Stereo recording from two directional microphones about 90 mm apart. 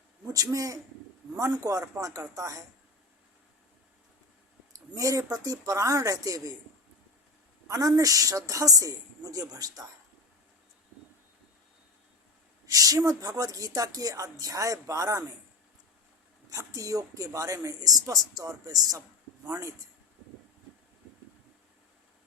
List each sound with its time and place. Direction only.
0.3 s speech: 40° right (ahead or behind)
4.9 s speech: 40° right (ahead or behind)
7.7 s speech: 40° right (ahead or behind)
12.6 s speech: 40° right (ahead or behind)
16.5 s speech: 35° right (ahead or behind)